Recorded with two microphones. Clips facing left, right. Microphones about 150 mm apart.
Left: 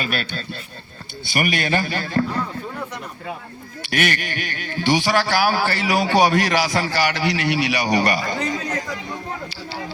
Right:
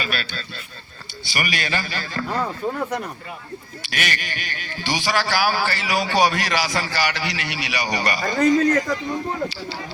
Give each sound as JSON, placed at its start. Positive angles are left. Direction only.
{"t": 0.0, "sound": "a man's voice", "side_deg": 50}
{"t": 2.4, "sound": "speech", "side_deg": -55}
{"t": 3.8, "sound": "a man's voice", "side_deg": 55}
{"t": 8.4, "sound": "speech", "side_deg": -45}